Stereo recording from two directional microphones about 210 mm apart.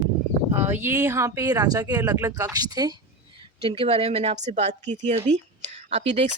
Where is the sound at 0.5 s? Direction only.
10° right (ahead or behind).